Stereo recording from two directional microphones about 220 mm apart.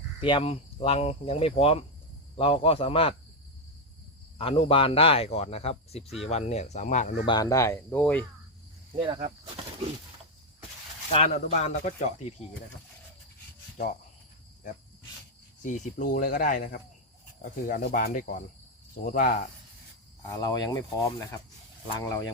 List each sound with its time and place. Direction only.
0.2 s speech: 25° left (ahead or behind)
4.4 s speech: 25° left (ahead or behind)
7.3 s speech: 15° left (ahead or behind)
11.1 s speech: 30° left (ahead or behind)
15.6 s speech: 35° left (ahead or behind)
20.2 s speech: 15° left (ahead or behind)